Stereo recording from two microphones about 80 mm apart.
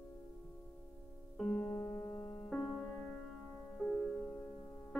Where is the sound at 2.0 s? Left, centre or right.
Left.